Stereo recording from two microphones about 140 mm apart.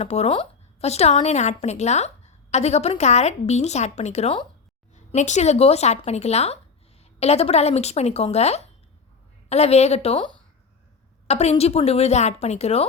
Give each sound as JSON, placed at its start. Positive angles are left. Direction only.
{"t": 0.0, "sound": "a woman's voice", "side_deg": 50}
{"t": 11.3, "sound": "a woman's voice", "side_deg": 50}